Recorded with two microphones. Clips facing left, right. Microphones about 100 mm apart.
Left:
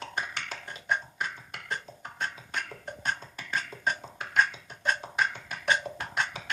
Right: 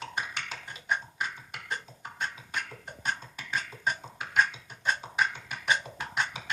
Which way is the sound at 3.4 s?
5° right (ahead or behind).